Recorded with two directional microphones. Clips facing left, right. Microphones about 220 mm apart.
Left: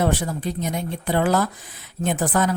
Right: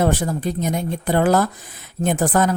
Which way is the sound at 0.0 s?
45° right (ahead or behind).